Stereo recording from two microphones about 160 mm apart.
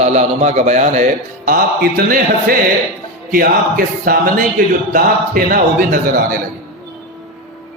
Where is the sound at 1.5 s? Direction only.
60° right (ahead or behind).